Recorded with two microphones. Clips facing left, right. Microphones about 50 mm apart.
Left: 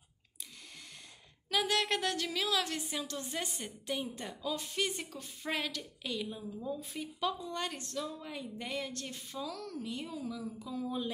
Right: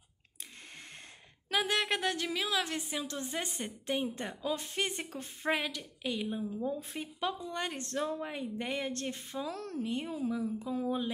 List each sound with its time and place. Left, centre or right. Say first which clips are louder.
1.5 s speech: right 1 dB; right
5.5 s speech: right 4 dB; centre; by 7.1 s right
7.2 s speech: even; right
7.7 s a woman's voice: right 5 dB; right